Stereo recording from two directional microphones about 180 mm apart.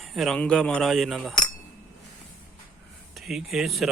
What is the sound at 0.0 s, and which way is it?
Speech, centre (ahead or behind).